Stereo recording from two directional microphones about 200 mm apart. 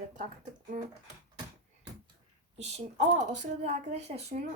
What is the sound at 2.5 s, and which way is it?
Speech, 35° right (ahead or behind).